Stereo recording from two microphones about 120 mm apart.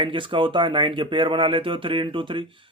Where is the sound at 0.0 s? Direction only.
45° right (ahead or behind).